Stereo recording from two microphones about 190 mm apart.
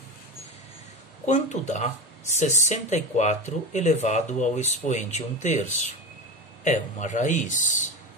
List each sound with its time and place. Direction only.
1.2 s speech: 40° left (ahead or behind)
6.6 s speech: 40° left (ahead or behind)